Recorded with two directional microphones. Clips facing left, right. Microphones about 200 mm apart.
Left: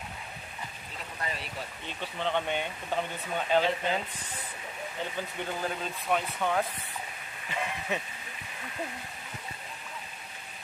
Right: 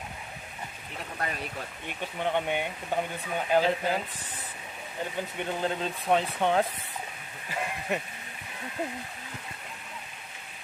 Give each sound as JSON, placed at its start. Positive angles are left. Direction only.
{"t": 1.9, "sound": "speech", "side_deg": -15}
{"t": 5.4, "sound": "speech", "side_deg": -25}
{"t": 7.4, "sound": "speech", "side_deg": -5}